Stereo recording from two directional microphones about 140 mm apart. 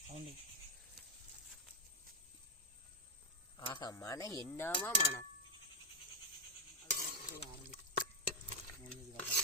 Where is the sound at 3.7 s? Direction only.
30° left (ahead or behind).